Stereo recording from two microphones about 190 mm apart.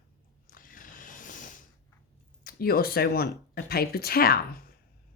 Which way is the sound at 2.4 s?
50° left (ahead or behind).